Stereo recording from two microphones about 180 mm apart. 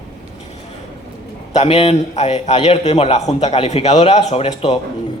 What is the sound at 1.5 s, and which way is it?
A man's voice, 35° left (ahead or behind).